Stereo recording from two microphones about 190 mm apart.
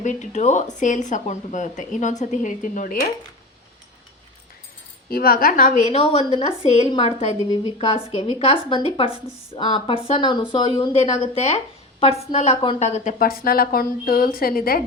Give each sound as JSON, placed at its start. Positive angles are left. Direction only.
{"t": 0.0, "sound": "speech", "side_deg": 40}
{"t": 5.0, "sound": "a woman's voice", "side_deg": 50}
{"t": 5.9, "sound": "speech", "side_deg": 30}
{"t": 13.1, "sound": "a woman's voice", "side_deg": 50}